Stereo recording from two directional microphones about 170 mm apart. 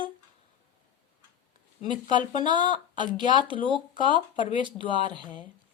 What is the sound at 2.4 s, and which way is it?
Speech, 25° right (ahead or behind).